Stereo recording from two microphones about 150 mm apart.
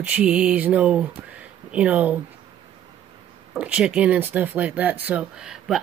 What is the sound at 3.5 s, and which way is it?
Speech, 10° right (ahead or behind).